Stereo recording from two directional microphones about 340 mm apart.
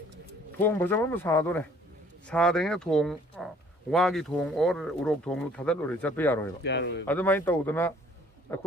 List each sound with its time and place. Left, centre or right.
0.6 s speech: centre
6.6 s speech: left
7.1 s speech: centre